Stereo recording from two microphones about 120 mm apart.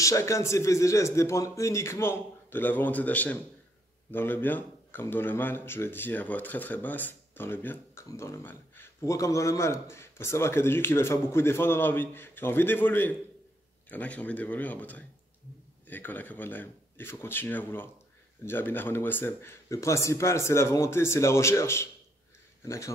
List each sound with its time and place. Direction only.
0.0 s speech: 25° left (ahead or behind)